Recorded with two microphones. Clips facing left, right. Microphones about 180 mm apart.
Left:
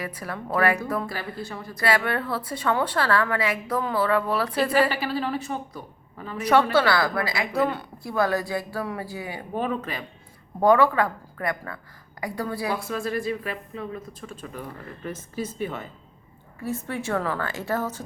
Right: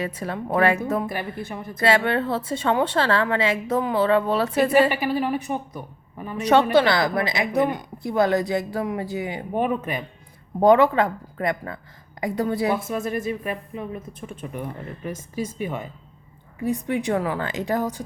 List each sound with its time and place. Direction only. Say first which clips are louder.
0.0 s a woman's voice: right 5 dB; 25° right (ahead or behind)